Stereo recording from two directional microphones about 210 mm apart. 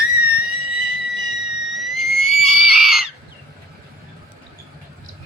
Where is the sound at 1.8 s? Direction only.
Centre (ahead or behind).